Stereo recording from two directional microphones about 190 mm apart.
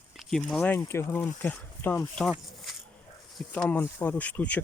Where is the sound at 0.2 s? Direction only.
Centre (ahead or behind).